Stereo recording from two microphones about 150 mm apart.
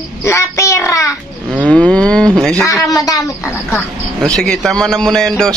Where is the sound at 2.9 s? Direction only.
25° left (ahead or behind).